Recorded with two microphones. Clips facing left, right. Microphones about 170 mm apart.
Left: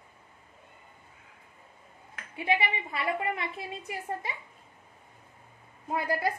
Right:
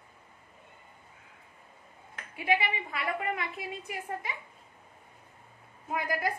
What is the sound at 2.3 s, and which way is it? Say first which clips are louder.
A woman's voice: left 1 dB; 25° left (ahead or behind).